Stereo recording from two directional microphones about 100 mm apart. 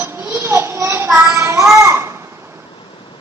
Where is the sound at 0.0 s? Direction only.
25° right (ahead or behind).